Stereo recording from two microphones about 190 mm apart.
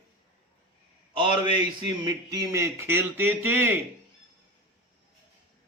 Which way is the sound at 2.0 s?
20° right (ahead or behind).